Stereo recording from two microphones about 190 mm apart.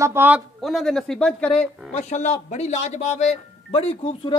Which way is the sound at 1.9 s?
35° left (ahead or behind).